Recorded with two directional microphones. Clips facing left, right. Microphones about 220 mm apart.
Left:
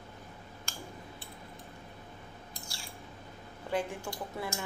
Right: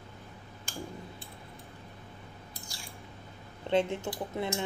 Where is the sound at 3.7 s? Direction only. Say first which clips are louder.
Right 6 dB; 25° right (ahead or behind).